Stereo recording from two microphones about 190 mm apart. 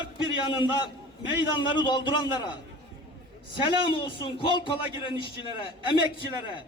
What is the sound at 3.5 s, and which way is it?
A man's voice, 25° left (ahead or behind).